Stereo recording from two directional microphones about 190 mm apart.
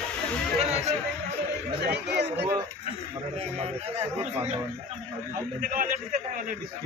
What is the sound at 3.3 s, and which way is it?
A man's voice, 35° right (ahead or behind).